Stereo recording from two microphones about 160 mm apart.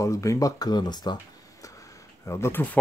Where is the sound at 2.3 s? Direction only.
15° left (ahead or behind).